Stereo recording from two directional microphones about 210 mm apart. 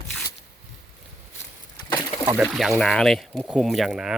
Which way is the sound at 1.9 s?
15° left (ahead or behind).